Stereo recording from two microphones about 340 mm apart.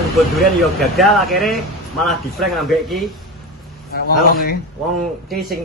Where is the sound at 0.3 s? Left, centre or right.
Centre.